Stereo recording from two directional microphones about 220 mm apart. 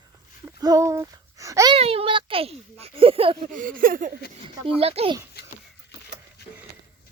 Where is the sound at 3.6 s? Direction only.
40° right (ahead or behind).